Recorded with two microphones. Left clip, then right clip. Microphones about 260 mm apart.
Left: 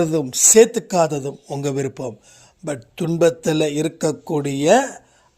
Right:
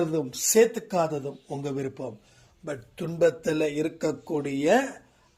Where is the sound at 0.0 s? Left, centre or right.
Left.